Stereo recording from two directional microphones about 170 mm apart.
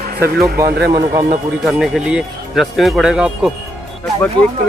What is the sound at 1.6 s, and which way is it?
Speech, centre (ahead or behind).